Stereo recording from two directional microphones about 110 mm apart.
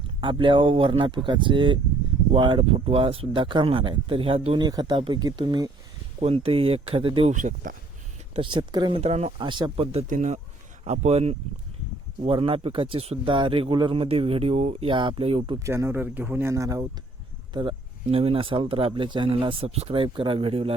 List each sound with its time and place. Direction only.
0.2 s speech: 50° right (ahead or behind)
4.6 s speech: 40° right (ahead or behind)
6.1 s speech: 60° right (ahead or behind)
8.4 s speech: 45° right (ahead or behind)
9.0 s speech: 75° right (ahead or behind)
9.4 s speech: 45° right (ahead or behind)
9.7 s speech: 60° right (ahead or behind)
12.2 s speech: 60° right (ahead or behind)
15.6 s speech: 25° right (ahead or behind)
17.5 s a sound: 45° right (ahead or behind)
18.2 s speech: 60° right (ahead or behind)